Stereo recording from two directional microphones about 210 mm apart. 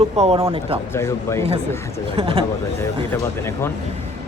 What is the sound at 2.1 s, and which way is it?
Speech, 25° right (ahead or behind).